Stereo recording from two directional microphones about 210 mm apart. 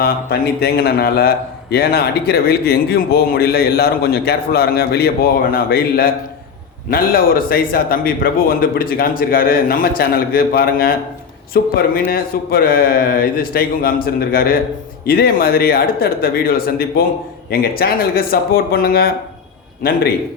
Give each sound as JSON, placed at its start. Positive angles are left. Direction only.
{"t": 0.0, "sound": "a man's voice", "side_deg": 45}
{"t": 6.9, "sound": "a man's voice", "side_deg": 45}